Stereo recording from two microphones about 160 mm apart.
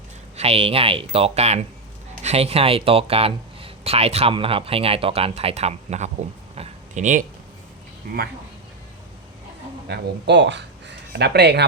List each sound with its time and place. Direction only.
0.3 s speech: 40° right (ahead or behind)
9.9 s speech: 90° right